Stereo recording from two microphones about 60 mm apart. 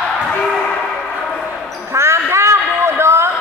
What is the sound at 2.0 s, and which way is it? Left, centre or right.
Basketball bounce, right.